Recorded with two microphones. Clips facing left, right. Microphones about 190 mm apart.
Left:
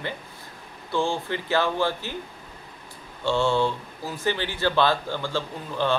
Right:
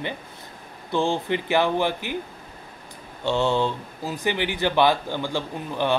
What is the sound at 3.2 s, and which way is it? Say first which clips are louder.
Speech: even; 15° right (ahead or behind).